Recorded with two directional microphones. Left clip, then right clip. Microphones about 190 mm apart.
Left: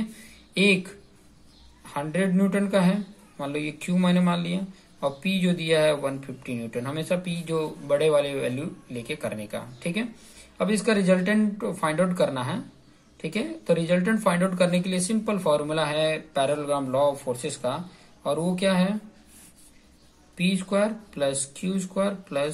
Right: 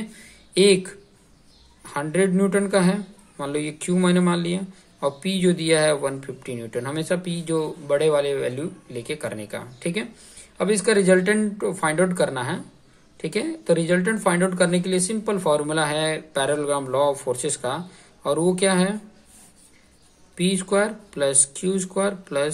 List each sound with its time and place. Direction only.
0.1 s a sound: 30° right (ahead or behind)
1.9 s speech: 30° right (ahead or behind)
20.3 s speech: 35° right (ahead or behind)